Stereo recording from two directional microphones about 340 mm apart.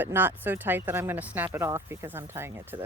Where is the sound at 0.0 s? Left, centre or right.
Centre.